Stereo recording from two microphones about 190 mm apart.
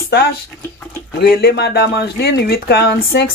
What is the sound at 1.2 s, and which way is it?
Speech, 55° left (ahead or behind).